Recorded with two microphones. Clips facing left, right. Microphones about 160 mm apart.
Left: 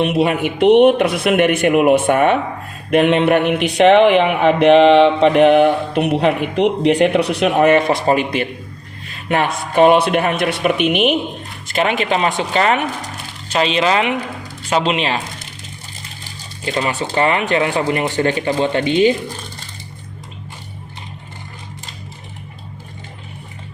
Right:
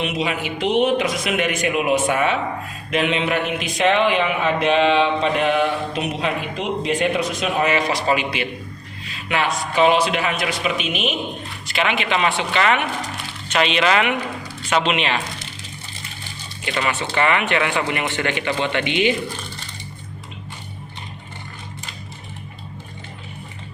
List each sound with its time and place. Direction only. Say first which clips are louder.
0.0 s speech: left 8 dB; 55° left (ahead or behind)
11.7 s speech: left 4 dB; 45° left (ahead or behind)
16.6 s speech: left 3 dB; 30° left (ahead or behind)